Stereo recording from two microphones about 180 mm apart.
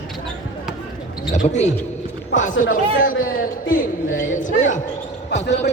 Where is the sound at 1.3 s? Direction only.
40° left (ahead or behind).